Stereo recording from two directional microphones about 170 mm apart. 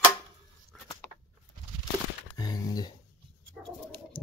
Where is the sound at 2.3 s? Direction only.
25° left (ahead or behind).